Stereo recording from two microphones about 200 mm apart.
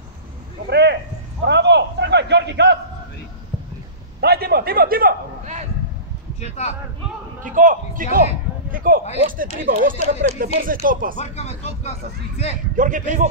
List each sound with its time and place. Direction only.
0.7 s a sound: 55° right (ahead or behind)
4.2 s a man's voice: 50° right (ahead or behind)
6.4 s speech: 35° left (ahead or behind)
7.4 s speech: 40° right (ahead or behind)
11.1 s speech: 35° left (ahead or behind)
12.7 s a man's voice: 40° right (ahead or behind)